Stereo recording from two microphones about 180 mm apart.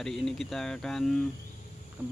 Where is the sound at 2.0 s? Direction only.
10° right (ahead or behind).